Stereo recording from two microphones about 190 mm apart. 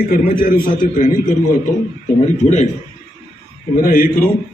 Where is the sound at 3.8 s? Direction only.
50° left (ahead or behind).